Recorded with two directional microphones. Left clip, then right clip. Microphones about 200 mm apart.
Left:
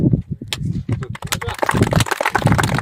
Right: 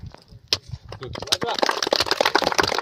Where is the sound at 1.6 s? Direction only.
55° right (ahead or behind).